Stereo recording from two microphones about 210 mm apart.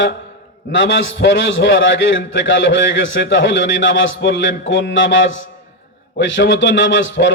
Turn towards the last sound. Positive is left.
turn(degrees=65)  # may be behind; listen again after turning